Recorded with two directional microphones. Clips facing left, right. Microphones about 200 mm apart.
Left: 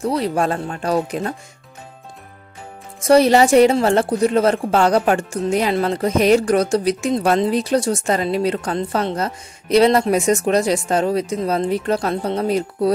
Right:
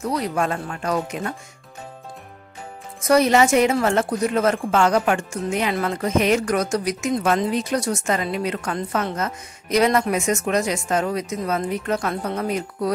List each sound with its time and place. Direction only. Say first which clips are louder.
0.0 s a woman's voice: left 4 dB; 30° left (ahead or behind)
3.0 s a woman's voice: left 4 dB; 30° left (ahead or behind)